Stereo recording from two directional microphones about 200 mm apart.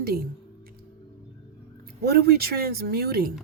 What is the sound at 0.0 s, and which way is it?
Speech, 50° right (ahead or behind).